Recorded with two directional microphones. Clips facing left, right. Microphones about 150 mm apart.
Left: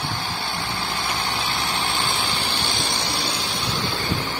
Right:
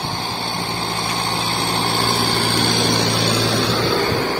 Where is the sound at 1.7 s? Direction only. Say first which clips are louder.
Right 6 dB; 45° right (ahead or behind).